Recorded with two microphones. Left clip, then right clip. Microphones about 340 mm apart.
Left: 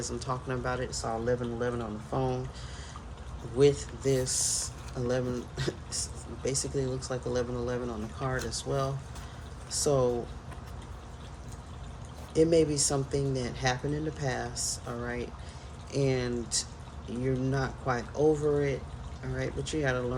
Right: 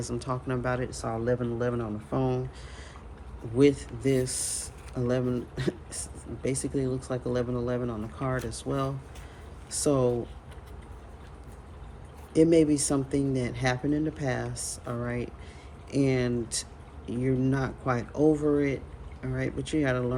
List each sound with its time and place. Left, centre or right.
0.0 s speech: right
3.6 s speech: right
12.3 s speech: right